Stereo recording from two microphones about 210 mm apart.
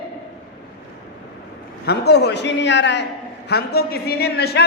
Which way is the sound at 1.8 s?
50° left (ahead or behind).